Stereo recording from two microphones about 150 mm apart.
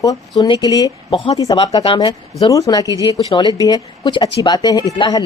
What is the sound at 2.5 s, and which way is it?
Speech, 25° left (ahead or behind).